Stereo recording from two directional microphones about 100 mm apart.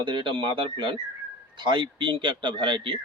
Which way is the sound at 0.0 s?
55° right (ahead or behind).